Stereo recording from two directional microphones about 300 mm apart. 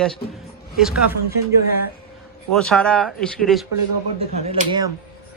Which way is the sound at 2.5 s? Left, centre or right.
Centre.